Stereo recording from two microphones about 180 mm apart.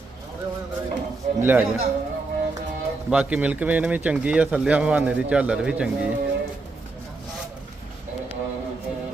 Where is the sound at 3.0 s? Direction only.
5° right (ahead or behind).